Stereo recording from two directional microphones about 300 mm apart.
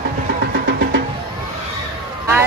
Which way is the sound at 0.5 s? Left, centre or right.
Right.